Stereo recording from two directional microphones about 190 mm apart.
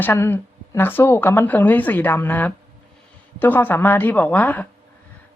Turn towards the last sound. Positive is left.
turn(degrees=10)  # may be behind; listen again after turning